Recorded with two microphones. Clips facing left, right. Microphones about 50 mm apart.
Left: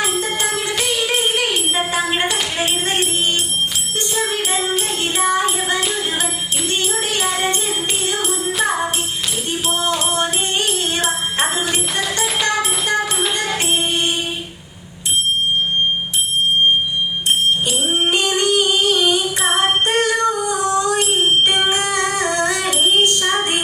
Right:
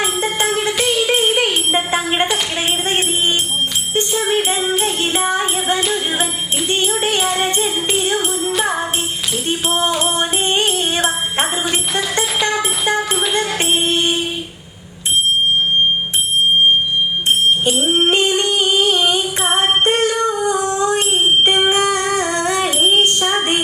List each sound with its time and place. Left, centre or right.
0.0 s music: right
2.2 s music: centre
2.9 s music: right
5.1 s music: right
6.7 s jingle bell: right
7.3 s music: centre
8.0 s music: right
9.5 s music: right
13.0 s a sound: centre
13.6 s music: right
13.8 s music: centre
17.7 s music: right
19.4 s female singing: right
21.7 s music: right